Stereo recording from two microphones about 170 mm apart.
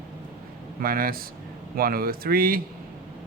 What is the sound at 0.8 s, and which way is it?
Speech, 60° right (ahead or behind).